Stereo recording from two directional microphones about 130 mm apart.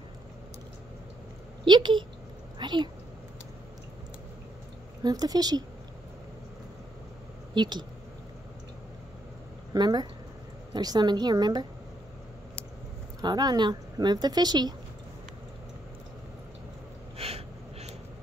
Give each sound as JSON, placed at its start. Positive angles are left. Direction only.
{"t": 1.6, "sound": "a woman's voice", "side_deg": -40}
{"t": 5.0, "sound": "speech", "side_deg": -30}
{"t": 7.5, "sound": "speech", "side_deg": -35}
{"t": 9.8, "sound": "speech", "side_deg": -30}
{"t": 13.2, "sound": "speech", "side_deg": -30}
{"t": 17.2, "sound": "a sound", "side_deg": -50}